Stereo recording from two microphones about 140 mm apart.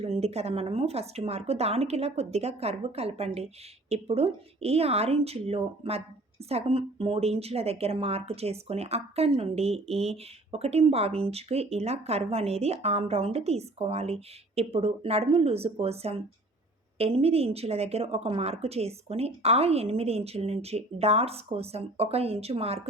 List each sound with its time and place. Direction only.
0.0 s speech: 50° right (ahead or behind)